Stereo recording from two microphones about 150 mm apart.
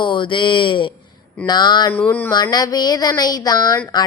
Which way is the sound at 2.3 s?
25° left (ahead or behind).